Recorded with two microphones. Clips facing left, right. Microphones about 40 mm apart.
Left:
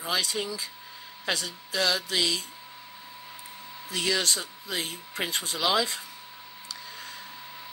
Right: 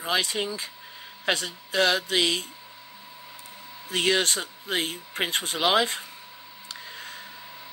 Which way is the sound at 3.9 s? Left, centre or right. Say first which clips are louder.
Right 4 dB; right.